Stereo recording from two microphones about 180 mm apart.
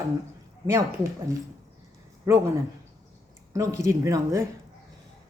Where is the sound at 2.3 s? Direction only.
15° right (ahead or behind).